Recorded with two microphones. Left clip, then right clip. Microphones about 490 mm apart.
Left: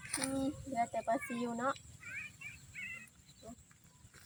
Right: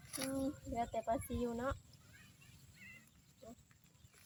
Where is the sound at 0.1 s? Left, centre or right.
Right.